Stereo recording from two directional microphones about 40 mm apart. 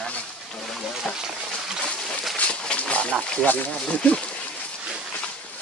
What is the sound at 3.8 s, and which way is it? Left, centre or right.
Speech, left.